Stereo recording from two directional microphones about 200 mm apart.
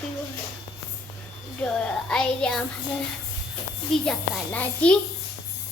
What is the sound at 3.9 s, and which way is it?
A child's voice, 5° left (ahead or behind).